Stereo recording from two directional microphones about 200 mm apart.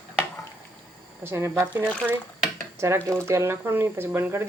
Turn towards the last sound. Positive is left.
turn(degrees=-10)  # may be behind; listen again after turning